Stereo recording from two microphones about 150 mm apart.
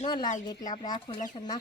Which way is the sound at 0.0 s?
30° left (ahead or behind).